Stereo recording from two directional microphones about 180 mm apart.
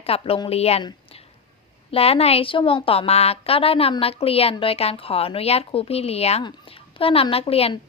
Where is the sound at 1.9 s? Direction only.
35° left (ahead or behind).